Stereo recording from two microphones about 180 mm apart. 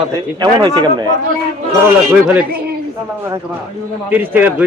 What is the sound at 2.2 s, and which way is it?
Speech, 10° right (ahead or behind).